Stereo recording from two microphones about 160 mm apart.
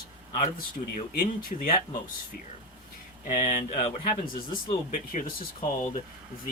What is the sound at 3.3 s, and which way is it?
Speech, 50° left (ahead or behind).